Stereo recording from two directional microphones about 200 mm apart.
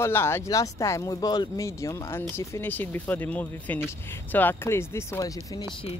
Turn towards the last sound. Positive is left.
turn(degrees=20)  # may be behind; listen again after turning